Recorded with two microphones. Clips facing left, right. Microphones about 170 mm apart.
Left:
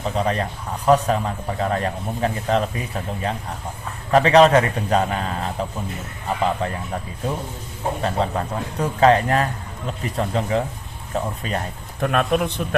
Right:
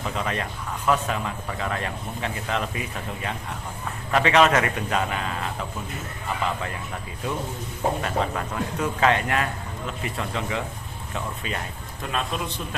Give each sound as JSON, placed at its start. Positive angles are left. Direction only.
{"t": 0.0, "sound": "a man's voice", "side_deg": 35}
{"t": 8.0, "sound": "a man's voice", "side_deg": 35}
{"t": 11.9, "sound": "a man's voice", "side_deg": 60}